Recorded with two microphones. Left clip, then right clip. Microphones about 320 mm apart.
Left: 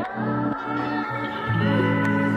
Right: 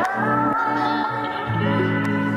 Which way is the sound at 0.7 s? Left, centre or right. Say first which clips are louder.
Right 5 dB; centre.